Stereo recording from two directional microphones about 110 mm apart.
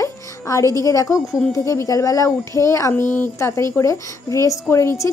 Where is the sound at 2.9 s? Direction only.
15° left (ahead or behind).